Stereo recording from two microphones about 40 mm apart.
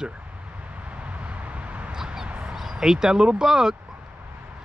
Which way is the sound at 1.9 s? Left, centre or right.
Centre.